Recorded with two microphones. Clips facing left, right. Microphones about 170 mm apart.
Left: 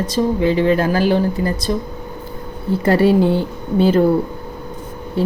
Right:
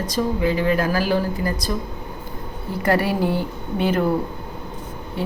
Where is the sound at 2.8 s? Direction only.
25° left (ahead or behind).